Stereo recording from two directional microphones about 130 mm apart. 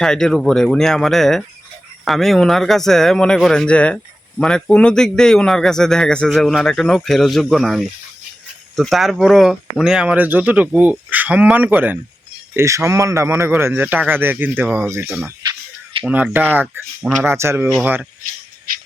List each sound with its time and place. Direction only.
0.0 s speech: 5° left (ahead or behind); by 15.2 s 20° right (ahead or behind)
15.4 s music: 40° right (ahead or behind)
16.0 s speech: 10° right (ahead or behind)